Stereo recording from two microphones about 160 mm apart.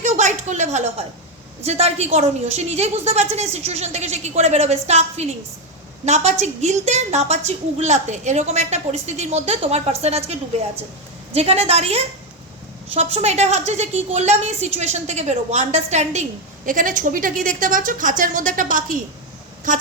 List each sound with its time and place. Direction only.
0.0 s a sound: 50° right (ahead or behind)
1.6 s a woman's voice: 40° right (ahead or behind)
6.4 s a woman's voice: 45° right (ahead or behind)
11.3 s a woman's voice: 40° right (ahead or behind)
16.6 s a woman's voice: 55° right (ahead or behind)